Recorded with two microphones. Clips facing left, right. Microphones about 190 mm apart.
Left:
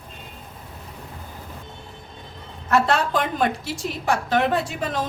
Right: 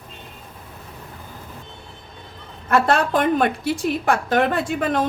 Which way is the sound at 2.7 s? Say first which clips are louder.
Right 2 dB; 55° right (ahead or behind).